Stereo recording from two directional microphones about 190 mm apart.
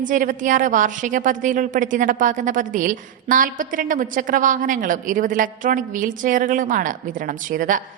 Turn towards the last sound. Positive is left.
turn(degrees=-45)  # may be behind; listen again after turning